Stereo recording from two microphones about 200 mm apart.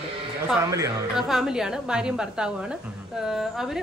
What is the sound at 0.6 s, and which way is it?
Speech, 15° right (ahead or behind).